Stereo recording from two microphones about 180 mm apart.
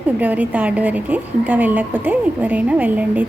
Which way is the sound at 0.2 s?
10° right (ahead or behind).